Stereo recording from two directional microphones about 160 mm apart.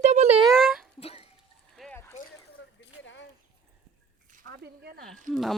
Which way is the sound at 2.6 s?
90° left.